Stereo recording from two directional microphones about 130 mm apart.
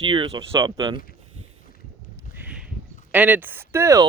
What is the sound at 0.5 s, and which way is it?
Speech, 30° right (ahead or behind).